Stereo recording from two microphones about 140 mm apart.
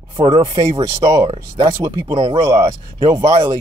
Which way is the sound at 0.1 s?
30° right (ahead or behind).